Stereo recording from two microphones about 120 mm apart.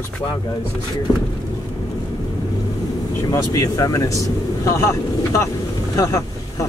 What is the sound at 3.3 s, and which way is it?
Speech, 25° left (ahead or behind).